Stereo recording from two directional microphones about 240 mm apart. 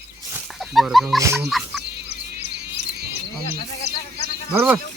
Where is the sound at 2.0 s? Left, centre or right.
Right.